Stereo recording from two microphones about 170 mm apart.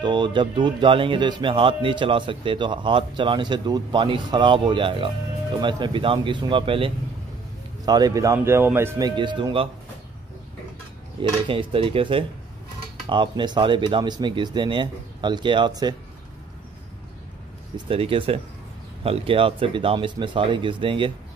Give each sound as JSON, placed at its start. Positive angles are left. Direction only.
{"t": 0.0, "sound": "speech", "side_deg": -25}
{"t": 11.1, "sound": "speech", "side_deg": -30}
{"t": 17.7, "sound": "speech", "side_deg": -35}